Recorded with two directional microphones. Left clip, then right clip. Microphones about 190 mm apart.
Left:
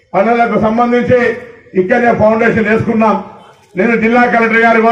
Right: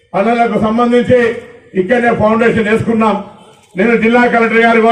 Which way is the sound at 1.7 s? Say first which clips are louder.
Left 1 dB; 20° left (ahead or behind).